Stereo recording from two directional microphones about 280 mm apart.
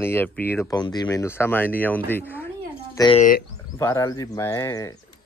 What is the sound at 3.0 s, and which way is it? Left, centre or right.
Speech, centre.